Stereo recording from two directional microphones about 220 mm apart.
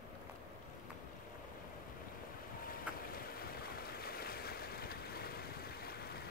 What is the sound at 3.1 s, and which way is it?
Waves, 45° left (ahead or behind).